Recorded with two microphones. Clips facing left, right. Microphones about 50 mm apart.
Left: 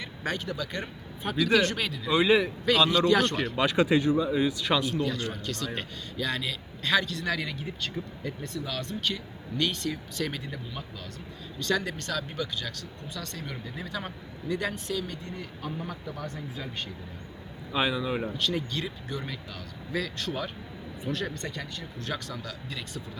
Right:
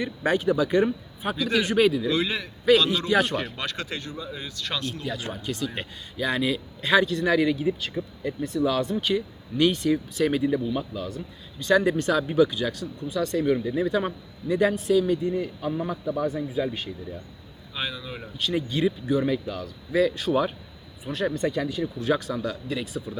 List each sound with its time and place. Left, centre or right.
0.0 s speech: centre
1.4 s speech: centre
1.6 s speech: centre
2.0 s speech: centre
3.1 s speech: centre
3.5 s speech: centre
5.0 s speech: centre
17.7 s speech: centre
18.3 s speech: centre